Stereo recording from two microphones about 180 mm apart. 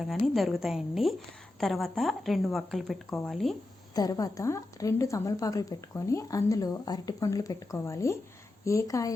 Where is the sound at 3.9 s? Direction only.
20° left (ahead or behind).